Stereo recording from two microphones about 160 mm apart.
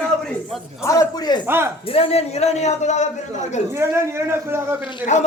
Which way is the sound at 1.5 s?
15° right (ahead or behind).